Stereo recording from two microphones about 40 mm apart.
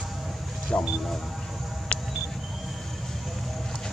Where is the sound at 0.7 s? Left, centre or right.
Left.